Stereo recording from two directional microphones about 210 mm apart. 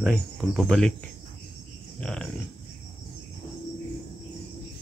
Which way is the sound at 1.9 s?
5° left (ahead or behind).